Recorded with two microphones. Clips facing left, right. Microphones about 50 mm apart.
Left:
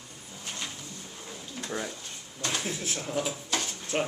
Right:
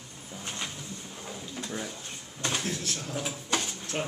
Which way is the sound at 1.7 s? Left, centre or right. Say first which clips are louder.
Left 5 dB; centre.